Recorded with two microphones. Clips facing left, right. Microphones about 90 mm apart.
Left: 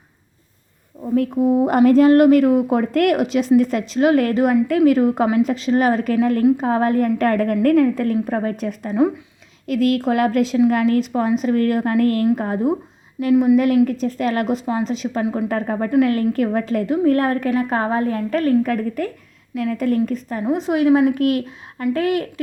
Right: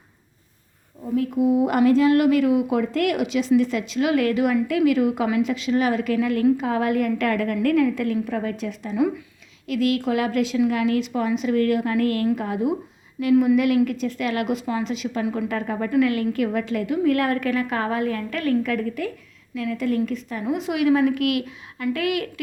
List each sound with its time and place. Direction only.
1.4 s a woman's voice: 40° left (ahead or behind)
9.0 s speech: 25° left (ahead or behind)
9.6 s a woman's voice: 45° left (ahead or behind)
13.3 s speech: 20° left (ahead or behind)
13.8 s a woman's voice: 35° left (ahead or behind)